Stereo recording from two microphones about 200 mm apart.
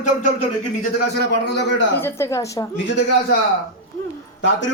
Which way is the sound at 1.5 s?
60° left (ahead or behind).